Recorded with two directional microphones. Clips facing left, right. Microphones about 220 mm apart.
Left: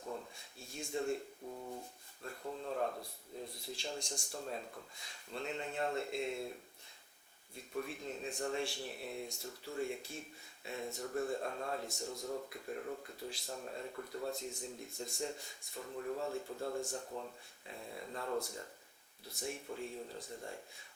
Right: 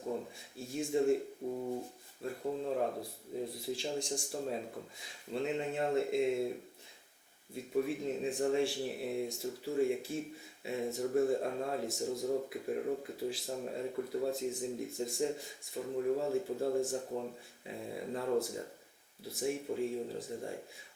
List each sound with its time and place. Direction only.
0.0 s a sound: 15° right (ahead or behind)
0.3 s speech: 5° right (ahead or behind)
1.5 s a sound: 25° right (ahead or behind)
2.2 s a sound: 15° right (ahead or behind)
3.4 s speech: 5° right (ahead or behind)
4.9 s speech: 5° right (ahead or behind)
7.7 s speech: 10° right (ahead or behind)
11.0 s speech: 20° right (ahead or behind)
12.2 s speech: 20° right (ahead or behind)
12.5 s speech: 10° right (ahead or behind)
13.5 s speech: 15° right (ahead or behind)
15.8 s speech: 15° right (ahead or behind)
17.7 s speech: 10° right (ahead or behind)